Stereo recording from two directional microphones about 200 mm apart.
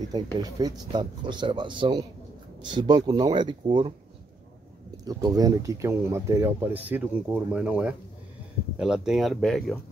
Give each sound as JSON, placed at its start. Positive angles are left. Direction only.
{"t": 0.1, "sound": "speech", "side_deg": -20}
{"t": 5.0, "sound": "speech", "side_deg": -20}